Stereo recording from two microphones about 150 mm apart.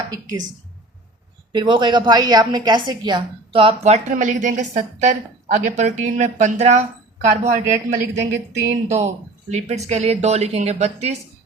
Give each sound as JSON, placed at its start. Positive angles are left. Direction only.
{"t": 0.1, "sound": "a woman's voice", "side_deg": -25}
{"t": 1.5, "sound": "a woman's voice", "side_deg": -30}
{"t": 8.9, "sound": "a woman's voice", "side_deg": -50}